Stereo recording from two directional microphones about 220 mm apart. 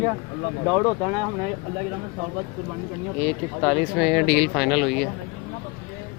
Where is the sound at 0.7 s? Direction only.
5° left (ahead or behind).